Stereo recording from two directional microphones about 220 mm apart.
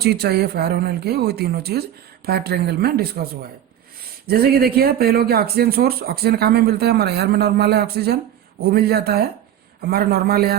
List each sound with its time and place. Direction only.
0.0 s speech: 45° right (ahead or behind)
4.3 s speech: 45° right (ahead or behind)